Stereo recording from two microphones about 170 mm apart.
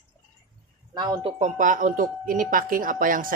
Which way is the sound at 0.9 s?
25° right (ahead or behind).